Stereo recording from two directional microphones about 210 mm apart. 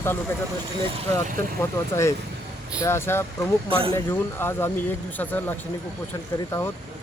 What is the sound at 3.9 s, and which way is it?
Speech, 10° left (ahead or behind).